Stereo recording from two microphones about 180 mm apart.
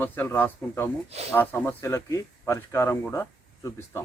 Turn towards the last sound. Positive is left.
turn(degrees=15)  # may be behind; listen again after turning